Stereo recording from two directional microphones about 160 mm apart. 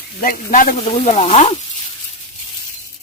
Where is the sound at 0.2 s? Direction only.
60° left (ahead or behind).